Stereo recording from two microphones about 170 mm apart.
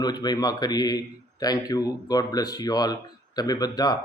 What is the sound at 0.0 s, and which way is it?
Speech, 25° left (ahead or behind).